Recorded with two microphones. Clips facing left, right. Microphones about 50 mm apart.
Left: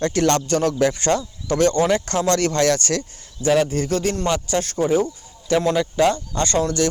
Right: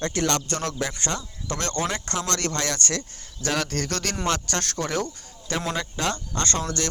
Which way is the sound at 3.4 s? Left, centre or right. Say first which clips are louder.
Left 8 dB; centre.